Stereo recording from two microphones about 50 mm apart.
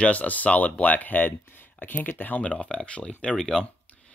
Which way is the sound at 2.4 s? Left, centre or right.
Left.